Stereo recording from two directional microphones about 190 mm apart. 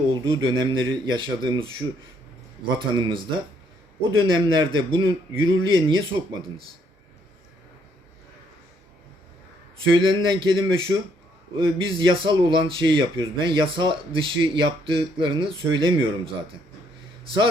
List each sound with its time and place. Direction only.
0.1 s speech: 25° right (ahead or behind)
2.7 s speech: 25° right (ahead or behind)
4.2 s speech: 25° right (ahead or behind)
9.9 s speech: 25° right (ahead or behind)